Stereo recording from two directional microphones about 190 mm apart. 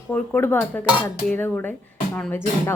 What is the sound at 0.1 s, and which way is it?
A woman's voice, 10° left (ahead or behind).